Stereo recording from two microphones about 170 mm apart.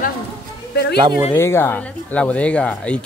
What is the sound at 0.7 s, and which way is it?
Speech, 80° left.